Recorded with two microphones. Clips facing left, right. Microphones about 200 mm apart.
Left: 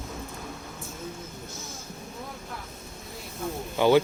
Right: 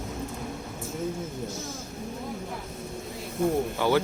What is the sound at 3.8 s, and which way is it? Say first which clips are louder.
Speech: left 7 dB; 20° left (ahead or behind).